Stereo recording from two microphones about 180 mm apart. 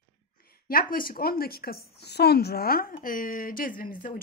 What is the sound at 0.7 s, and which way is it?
A woman's voice, 55° left (ahead or behind).